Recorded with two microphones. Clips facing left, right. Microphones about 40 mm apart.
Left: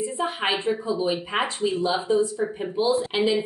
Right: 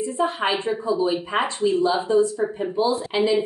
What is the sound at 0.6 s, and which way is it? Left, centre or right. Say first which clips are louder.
Speech: right 2 dB; centre.